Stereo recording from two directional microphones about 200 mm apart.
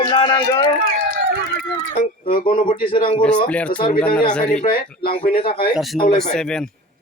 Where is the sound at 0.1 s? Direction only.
25° left (ahead or behind).